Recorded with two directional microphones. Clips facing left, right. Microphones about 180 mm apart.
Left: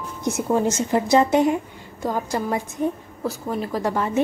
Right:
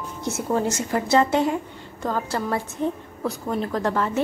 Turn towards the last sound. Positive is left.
turn(degrees=15)  # may be behind; listen again after turning